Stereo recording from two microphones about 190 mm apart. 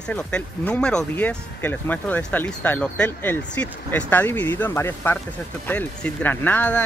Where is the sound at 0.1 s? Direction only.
5° left (ahead or behind).